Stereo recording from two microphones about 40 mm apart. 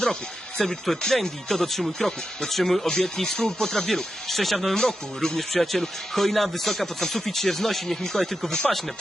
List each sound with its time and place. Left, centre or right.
0.6 s speech: centre
2.8 s speech: centre
4.8 s speech: centre
5.4 s speech: centre